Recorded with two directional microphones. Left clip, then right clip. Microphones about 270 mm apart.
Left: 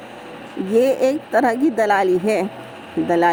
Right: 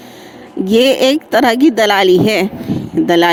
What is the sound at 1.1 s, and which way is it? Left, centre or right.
Speech, right.